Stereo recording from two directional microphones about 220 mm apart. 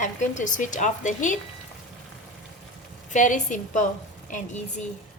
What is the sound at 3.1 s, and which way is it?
Speech, 35° left (ahead or behind).